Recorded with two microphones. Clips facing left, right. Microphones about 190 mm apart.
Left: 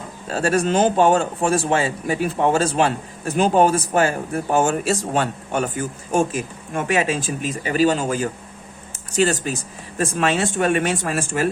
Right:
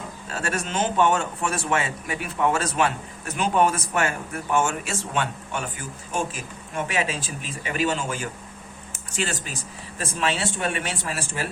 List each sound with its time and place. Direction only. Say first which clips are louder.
0.3 s a man's voice: left 10 dB; 35° left (ahead or behind)